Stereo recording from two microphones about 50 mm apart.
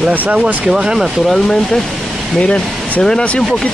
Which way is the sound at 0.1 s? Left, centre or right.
Right.